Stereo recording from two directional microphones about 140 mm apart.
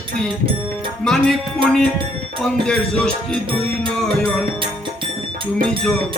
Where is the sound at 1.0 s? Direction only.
5° left (ahead or behind).